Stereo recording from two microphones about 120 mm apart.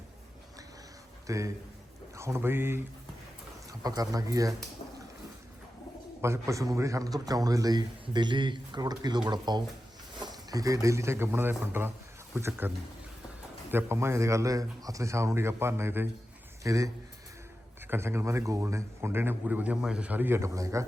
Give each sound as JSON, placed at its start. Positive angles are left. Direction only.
{"t": 1.3, "sound": "a man's voice", "side_deg": -25}
{"t": 3.7, "sound": "a man's voice", "side_deg": -30}
{"t": 6.2, "sound": "a man's voice", "side_deg": -25}